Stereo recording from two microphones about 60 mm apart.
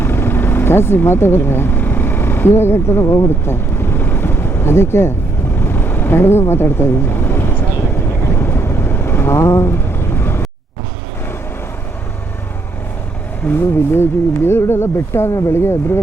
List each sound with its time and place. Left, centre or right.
0.0 s vehicle: left
6.5 s speech: left
8.4 s vehicle: left
13.5 s speech: left